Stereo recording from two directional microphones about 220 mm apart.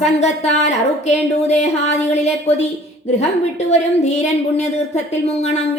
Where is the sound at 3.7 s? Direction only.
30° left (ahead or behind).